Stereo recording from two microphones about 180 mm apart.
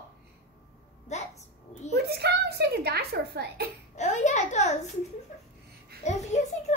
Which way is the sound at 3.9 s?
40° left (ahead or behind).